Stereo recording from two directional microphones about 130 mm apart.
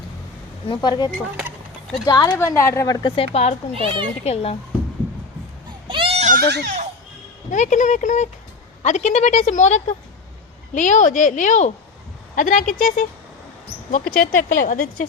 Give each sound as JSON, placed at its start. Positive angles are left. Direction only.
{"t": 0.7, "sound": "speech", "side_deg": 35}
{"t": 1.4, "sound": "a sound", "side_deg": -10}
{"t": 2.0, "sound": "speech", "side_deg": 30}
{"t": 3.2, "sound": "a child's voice", "side_deg": 50}
{"t": 3.8, "sound": "a child's voice", "side_deg": -40}
{"t": 4.2, "sound": "a child's voice", "side_deg": 55}
{"t": 5.9, "sound": "goat", "side_deg": -45}
{"t": 7.5, "sound": "a woman's voice", "side_deg": 70}
{"t": 12.4, "sound": "speech", "side_deg": 80}
{"t": 14.2, "sound": "a woman's voice", "side_deg": 90}